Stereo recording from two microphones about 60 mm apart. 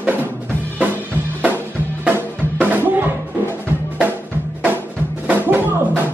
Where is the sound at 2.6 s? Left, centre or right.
Right.